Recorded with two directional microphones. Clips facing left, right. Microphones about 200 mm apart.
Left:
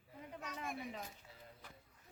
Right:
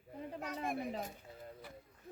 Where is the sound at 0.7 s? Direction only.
55° right (ahead or behind).